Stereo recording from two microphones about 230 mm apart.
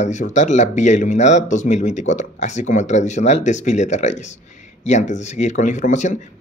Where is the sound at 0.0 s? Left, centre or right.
Left.